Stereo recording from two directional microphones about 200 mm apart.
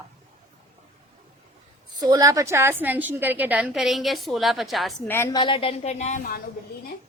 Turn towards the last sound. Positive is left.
turn(degrees=35)  # may be behind; listen again after turning